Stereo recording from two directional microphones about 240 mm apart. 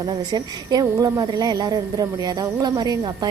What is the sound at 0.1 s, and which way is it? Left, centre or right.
A woman's voice, centre.